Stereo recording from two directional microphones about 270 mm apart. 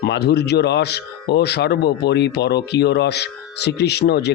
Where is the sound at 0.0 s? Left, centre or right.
Left.